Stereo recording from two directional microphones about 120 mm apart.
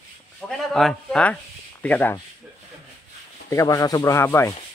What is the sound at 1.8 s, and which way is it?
Rub, 15° left (ahead or behind).